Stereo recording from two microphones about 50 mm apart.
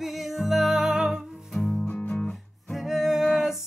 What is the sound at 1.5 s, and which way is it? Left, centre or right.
Music, centre.